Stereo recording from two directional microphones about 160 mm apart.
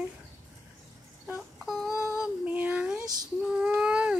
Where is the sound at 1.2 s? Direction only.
5° right (ahead or behind).